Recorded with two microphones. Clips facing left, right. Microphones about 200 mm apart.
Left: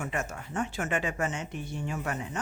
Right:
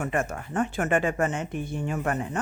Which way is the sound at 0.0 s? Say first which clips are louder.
Right 6 dB; 55° right (ahead or behind).